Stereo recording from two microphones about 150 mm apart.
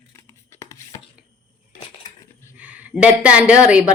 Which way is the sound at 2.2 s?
20° left (ahead or behind).